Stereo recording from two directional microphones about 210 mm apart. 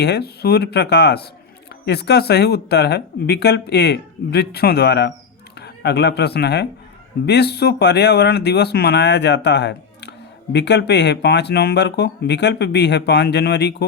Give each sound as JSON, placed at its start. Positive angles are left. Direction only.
{"t": 0.0, "sound": "speech", "side_deg": 50}